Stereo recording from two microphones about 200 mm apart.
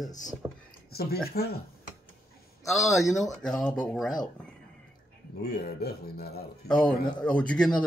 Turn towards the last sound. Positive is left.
turn(degrees=5)  # may be behind; listen again after turning